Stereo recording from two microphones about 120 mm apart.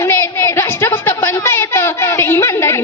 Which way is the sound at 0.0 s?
20° left (ahead or behind).